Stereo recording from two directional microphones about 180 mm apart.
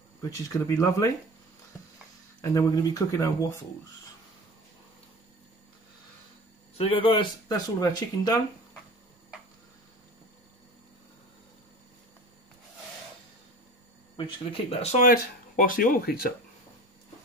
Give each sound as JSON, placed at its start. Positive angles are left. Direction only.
{"t": 0.2, "sound": "speech", "side_deg": 15}
{"t": 2.4, "sound": "speech", "side_deg": 20}
{"t": 6.8, "sound": "speech", "side_deg": 30}
{"t": 14.1, "sound": "speech", "side_deg": 30}
{"t": 15.0, "sound": "speech", "side_deg": 50}